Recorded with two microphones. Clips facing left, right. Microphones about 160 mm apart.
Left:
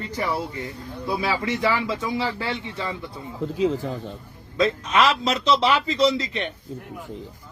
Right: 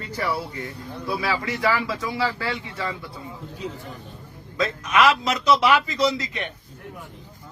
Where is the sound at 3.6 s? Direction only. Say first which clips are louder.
Left 12 dB; 90° left.